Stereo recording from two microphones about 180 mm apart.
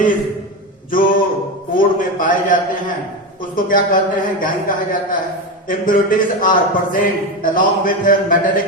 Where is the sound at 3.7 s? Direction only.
50° left (ahead or behind).